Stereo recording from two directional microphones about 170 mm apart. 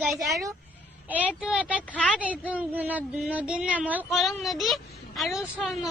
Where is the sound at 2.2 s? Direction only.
10° right (ahead or behind).